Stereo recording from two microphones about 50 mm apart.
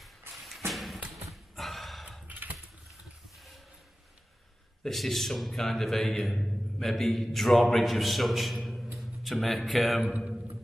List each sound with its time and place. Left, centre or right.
0.3 s a sound: centre
2.2 s typing: right
4.8 s a man's voice: centre